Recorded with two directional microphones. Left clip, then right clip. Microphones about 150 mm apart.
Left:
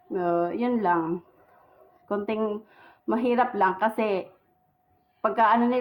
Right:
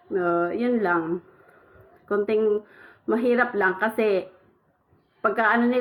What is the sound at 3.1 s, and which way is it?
A woman's voice, 30° left (ahead or behind).